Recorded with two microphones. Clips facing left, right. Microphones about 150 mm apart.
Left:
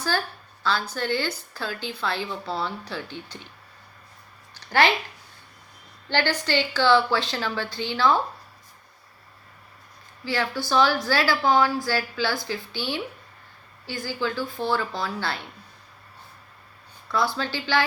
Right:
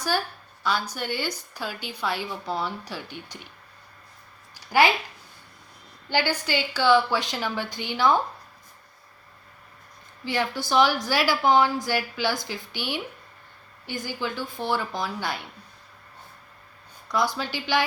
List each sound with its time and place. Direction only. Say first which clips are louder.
0.1 s a woman's voice: even; 15° right (ahead or behind)
4.5 s a sound: right 1 dB; 10° right (ahead or behind)
6.1 s a woman's voice: left 1 dB; 10° right (ahead or behind)
10.2 s a woman's voice: even; 20° right (ahead or behind)
17.1 s a woman's voice: even; 15° right (ahead or behind)